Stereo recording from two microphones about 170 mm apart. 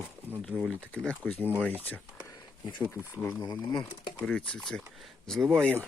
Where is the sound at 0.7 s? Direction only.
5° left (ahead or behind).